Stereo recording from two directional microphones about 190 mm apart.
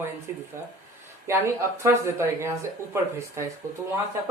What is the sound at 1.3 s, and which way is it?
Speech, 15° right (ahead or behind).